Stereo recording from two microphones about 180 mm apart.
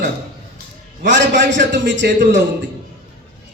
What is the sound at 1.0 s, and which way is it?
A man's voice, 85° right.